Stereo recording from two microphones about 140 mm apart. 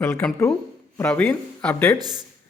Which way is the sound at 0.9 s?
15° left (ahead or behind).